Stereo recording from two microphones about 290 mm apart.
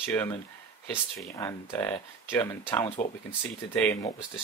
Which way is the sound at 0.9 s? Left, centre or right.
Centre.